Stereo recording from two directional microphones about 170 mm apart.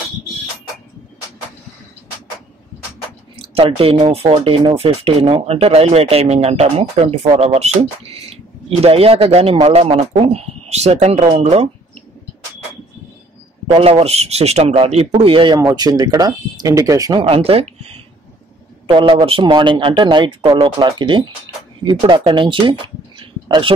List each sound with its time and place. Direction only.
3.3 s speech: 35° right (ahead or behind)
13.7 s a man's voice: 35° right (ahead or behind)
17.2 s a man's voice: 35° right (ahead or behind)